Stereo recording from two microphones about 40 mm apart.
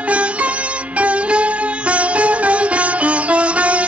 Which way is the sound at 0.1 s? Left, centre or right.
Right.